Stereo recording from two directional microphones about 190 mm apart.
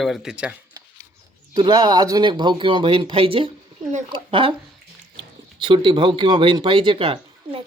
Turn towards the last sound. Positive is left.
turn(degrees=-30)  # may be behind; listen again after turning